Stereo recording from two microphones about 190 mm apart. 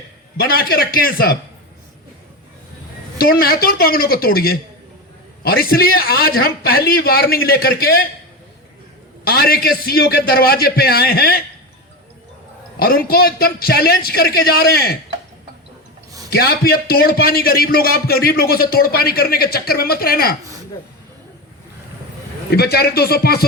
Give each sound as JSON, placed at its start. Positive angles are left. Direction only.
{"t": 0.3, "sound": "a man's voice", "side_deg": 55}
{"t": 3.2, "sound": "a man's voice", "side_deg": 50}
{"t": 9.2, "sound": "a man's voice", "side_deg": 55}
{"t": 12.8, "sound": "a man's voice", "side_deg": 50}
{"t": 16.3, "sound": "a man's voice", "side_deg": 55}
{"t": 22.4, "sound": "a man's voice", "side_deg": 55}